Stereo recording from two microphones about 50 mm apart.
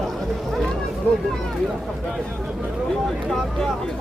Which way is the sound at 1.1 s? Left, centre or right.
Left.